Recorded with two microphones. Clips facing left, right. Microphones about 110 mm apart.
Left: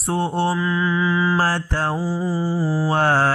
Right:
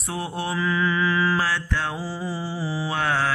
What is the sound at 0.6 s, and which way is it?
Mantra, 10° left (ahead or behind).